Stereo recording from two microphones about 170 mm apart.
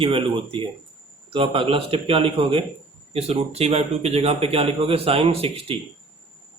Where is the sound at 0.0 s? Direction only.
30° right (ahead or behind).